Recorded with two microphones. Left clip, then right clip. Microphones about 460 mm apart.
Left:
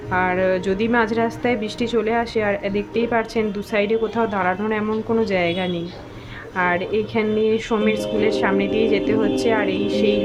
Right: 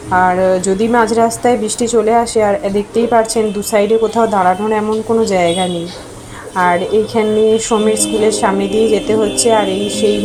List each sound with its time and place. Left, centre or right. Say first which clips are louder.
0.1 s a woman's voice: right 8 dB; left